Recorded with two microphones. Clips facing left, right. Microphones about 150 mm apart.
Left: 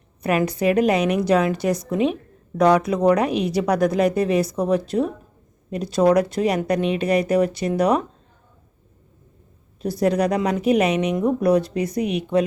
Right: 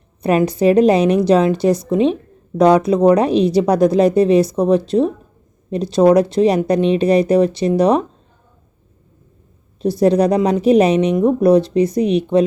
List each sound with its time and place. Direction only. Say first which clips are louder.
0.2 s speech: right 6 dB; 25° right (ahead or behind)
9.8 s speech: right 6 dB; 25° right (ahead or behind)